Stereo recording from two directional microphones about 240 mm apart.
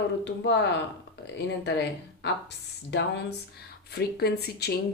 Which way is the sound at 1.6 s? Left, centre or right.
Left.